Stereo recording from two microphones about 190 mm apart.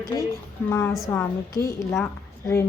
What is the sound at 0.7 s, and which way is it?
Speech, 10° left (ahead or behind).